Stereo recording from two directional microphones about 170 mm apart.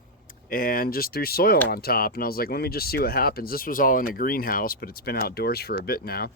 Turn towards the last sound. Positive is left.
turn(degrees=65)  # may be behind; listen again after turning